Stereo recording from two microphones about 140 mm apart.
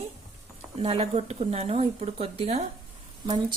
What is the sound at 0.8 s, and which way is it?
Speech, 45° right (ahead or behind).